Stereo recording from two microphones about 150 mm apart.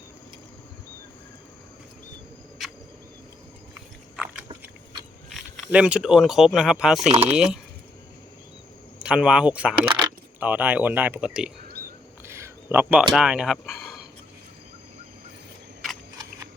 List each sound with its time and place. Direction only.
5.3 s speech: centre (ahead or behind)
7.1 s speech: 45° right (ahead or behind)
7.3 s speech: 5° right (ahead or behind)
9.0 s speech: 5° right (ahead or behind)
12.2 s a sound: 15° right (ahead or behind)
13.1 s speech: 5° right (ahead or behind)